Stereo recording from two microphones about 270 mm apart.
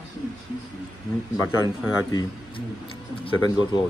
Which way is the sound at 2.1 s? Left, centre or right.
Centre.